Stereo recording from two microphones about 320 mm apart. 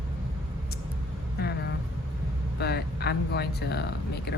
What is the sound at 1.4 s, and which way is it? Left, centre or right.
Vehicle, left.